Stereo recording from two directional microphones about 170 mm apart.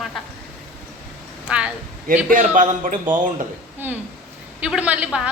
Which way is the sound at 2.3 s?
50° right (ahead or behind).